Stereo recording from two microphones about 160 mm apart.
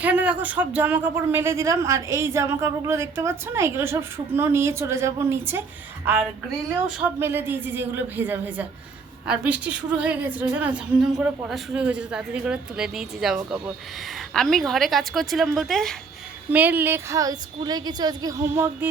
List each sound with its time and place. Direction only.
0.0 s speech: 10° right (ahead or behind)
7.0 s speech: 15° right (ahead or behind); by 16.0 s centre (ahead or behind)
16.5 s a woman's voice: 10° right (ahead or behind)